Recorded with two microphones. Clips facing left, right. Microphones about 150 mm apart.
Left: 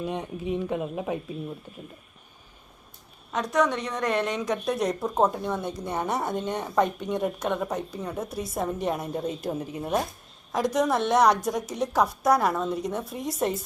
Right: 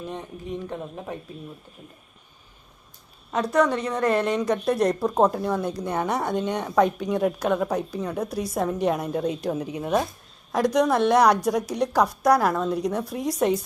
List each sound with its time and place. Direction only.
0.0 s speech: 10° left (ahead or behind)
3.3 s a woman's voice: centre (ahead or behind)